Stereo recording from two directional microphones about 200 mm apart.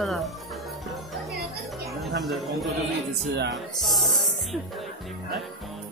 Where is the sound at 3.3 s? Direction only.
60° right (ahead or behind).